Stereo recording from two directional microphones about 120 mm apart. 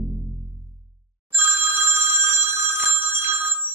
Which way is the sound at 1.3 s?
15° right (ahead or behind).